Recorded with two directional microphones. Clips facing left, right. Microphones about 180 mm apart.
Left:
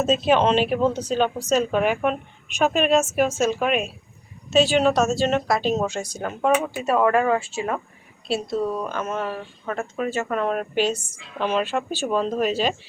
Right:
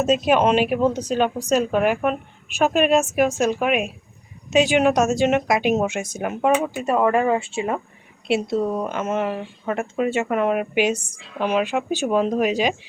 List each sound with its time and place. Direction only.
0.0 s speech: 10° right (ahead or behind)
7.3 s speech: 25° right (ahead or behind)